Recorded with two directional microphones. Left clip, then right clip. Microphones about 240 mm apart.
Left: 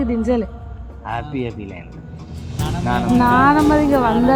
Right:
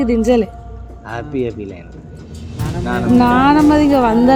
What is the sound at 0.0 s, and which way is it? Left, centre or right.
Speech, right.